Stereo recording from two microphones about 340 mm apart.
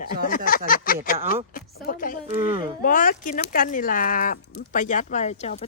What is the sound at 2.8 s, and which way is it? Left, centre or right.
Speech, left.